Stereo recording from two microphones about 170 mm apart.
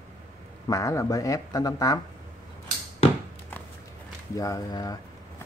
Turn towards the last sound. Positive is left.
turn(degrees=20)  # may be behind; listen again after turning